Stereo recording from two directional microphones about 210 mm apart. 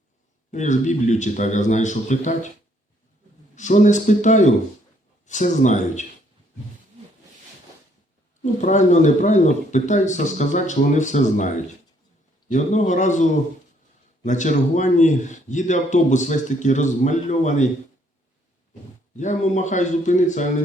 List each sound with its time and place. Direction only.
0.5 s a man's voice: 35° left (ahead or behind)
3.5 s a man's voice: 35° left (ahead or behind)
8.6 s a man's voice: 35° left (ahead or behind)
19.1 s a man's voice: 35° left (ahead or behind)